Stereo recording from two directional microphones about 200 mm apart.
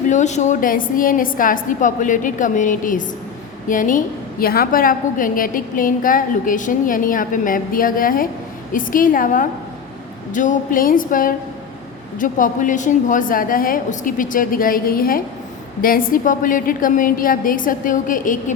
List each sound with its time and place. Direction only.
0.1 s a woman's voice: 35° left (ahead or behind)